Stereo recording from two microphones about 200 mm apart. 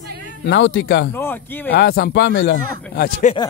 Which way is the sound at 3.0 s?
35° left (ahead or behind).